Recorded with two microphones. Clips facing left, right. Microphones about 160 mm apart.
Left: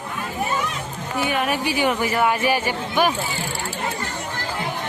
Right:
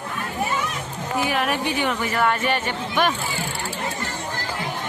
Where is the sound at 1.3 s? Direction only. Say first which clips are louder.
Left 3 dB; centre (ahead or behind).